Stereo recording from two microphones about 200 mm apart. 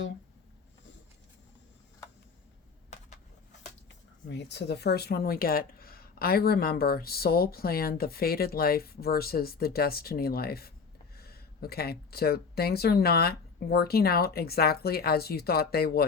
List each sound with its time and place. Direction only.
4.3 s speech: 60° left (ahead or behind)